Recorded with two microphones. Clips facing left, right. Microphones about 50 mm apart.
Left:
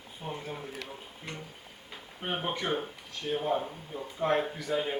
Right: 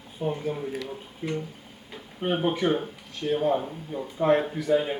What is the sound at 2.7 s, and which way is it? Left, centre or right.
Speech, centre.